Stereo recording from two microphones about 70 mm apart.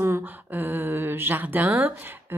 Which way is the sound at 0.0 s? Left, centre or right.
Right.